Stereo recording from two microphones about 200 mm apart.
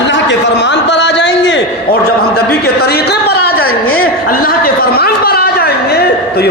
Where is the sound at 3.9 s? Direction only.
45° left (ahead or behind).